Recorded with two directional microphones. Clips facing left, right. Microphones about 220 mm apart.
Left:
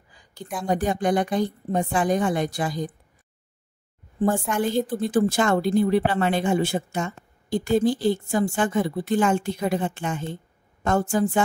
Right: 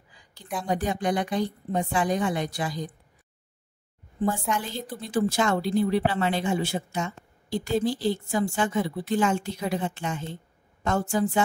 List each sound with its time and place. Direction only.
0.1 s a sound: 50° left (ahead or behind)
0.7 s a woman's voice: 50° left (ahead or behind)
4.2 s a woman's voice: 50° left (ahead or behind)